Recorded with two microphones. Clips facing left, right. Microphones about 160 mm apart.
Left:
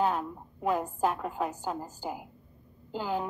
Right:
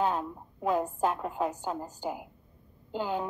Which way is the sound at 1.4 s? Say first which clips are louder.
Right 2 dB; 20° right (ahead or behind).